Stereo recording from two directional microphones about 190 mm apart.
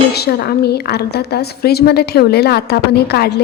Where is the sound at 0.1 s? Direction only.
55° left (ahead or behind).